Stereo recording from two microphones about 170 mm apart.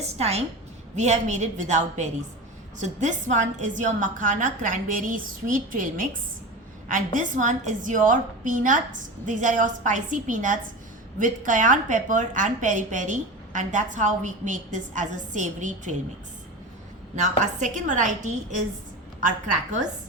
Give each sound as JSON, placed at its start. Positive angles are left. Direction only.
{"t": 0.0, "sound": "a woman's voice", "side_deg": -40}
{"t": 17.2, "sound": "a woman's voice", "side_deg": -45}
{"t": 19.2, "sound": "a woman's voice", "side_deg": -45}